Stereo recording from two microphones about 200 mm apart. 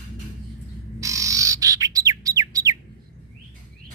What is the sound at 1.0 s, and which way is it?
Bird, 15° right (ahead or behind).